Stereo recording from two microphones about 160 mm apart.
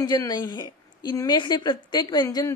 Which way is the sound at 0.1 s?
25° left (ahead or behind).